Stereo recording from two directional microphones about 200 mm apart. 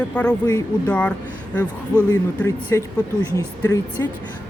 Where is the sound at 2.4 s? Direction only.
15° left (ahead or behind).